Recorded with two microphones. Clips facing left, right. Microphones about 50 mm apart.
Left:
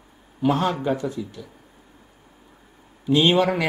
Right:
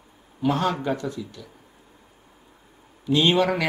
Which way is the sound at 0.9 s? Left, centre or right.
Centre.